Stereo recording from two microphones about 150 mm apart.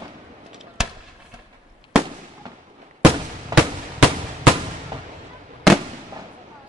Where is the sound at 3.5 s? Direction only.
25° right (ahead or behind).